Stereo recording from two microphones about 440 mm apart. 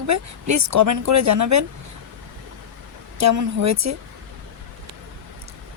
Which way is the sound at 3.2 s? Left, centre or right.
Right.